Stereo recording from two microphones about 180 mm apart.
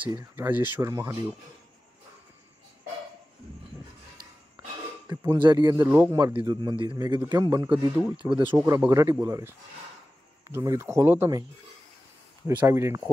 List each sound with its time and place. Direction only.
0.0 s speech: 20° right (ahead or behind)
5.0 s speech: 15° right (ahead or behind)
5.9 s speech: 10° right (ahead or behind)
12.4 s speech: 15° right (ahead or behind)